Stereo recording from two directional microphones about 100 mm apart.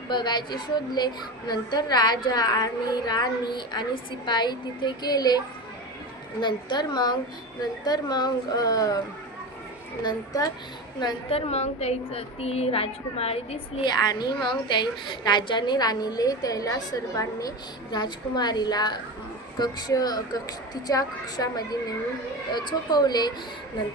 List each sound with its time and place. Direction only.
0.1 s a woman's voice: 50° left (ahead or behind)
6.4 s a woman's voice: 50° left (ahead or behind)
10.0 s a woman's voice: 45° left (ahead or behind)
11.3 s a woman's voice: 85° left
13.8 s a woman's voice: 45° left (ahead or behind)
17.9 s a woman's voice: 45° left (ahead or behind)